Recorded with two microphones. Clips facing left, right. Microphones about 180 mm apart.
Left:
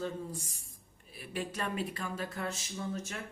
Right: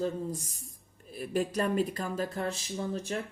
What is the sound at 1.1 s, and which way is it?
Speech, 40° right (ahead or behind).